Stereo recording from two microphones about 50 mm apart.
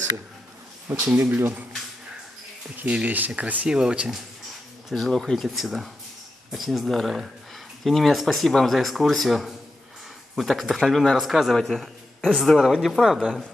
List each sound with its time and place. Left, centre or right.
0.9 s speech: right
2.8 s speech: right
3.6 s speech: centre
4.8 s speech: centre
11.5 s speech: centre
12.6 s speech: centre